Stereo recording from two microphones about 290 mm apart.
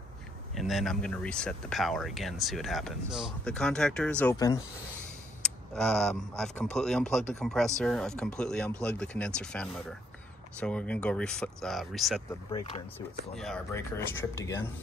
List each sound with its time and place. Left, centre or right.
0.6 s a man's voice: centre
5.8 s a man's voice: centre
12.4 s speech: centre
13.3 s speech: centre